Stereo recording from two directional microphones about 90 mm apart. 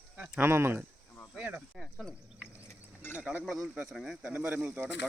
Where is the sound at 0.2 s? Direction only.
20° right (ahead or behind).